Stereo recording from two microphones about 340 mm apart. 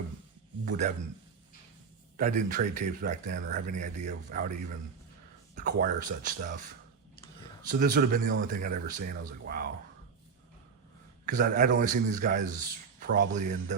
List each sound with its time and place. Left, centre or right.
0.7 s a man's voice: right
2.1 s a man's voice: right
5.5 s a man's voice: right
7.7 s a man's voice: right
11.3 s a man's voice: right